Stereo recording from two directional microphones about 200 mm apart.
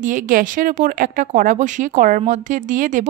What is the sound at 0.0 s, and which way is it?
Speech, 40° right (ahead or behind).